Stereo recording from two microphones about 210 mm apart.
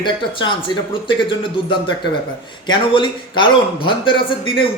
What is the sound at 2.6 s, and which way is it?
Speech, 20° left (ahead or behind).